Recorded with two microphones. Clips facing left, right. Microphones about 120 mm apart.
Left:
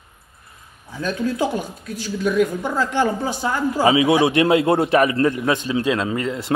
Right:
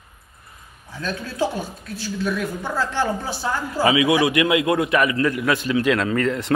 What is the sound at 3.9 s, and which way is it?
A man's voice, 30° left (ahead or behind).